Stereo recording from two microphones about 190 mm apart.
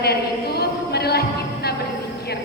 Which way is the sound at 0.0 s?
55° left (ahead or behind).